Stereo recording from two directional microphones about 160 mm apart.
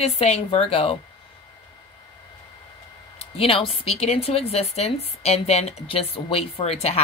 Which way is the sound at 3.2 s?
35° left (ahead or behind).